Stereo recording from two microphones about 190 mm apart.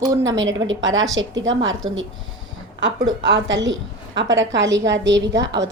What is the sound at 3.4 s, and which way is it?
A woman's voice, 75° right (ahead or behind).